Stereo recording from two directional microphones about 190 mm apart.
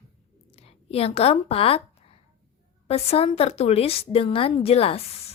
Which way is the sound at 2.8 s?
30° left (ahead or behind).